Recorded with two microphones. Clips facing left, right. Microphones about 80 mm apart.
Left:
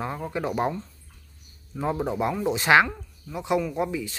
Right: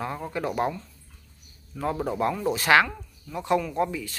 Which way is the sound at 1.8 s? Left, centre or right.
Centre.